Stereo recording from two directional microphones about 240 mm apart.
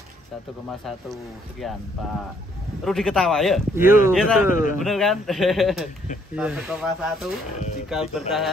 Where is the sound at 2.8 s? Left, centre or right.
Centre.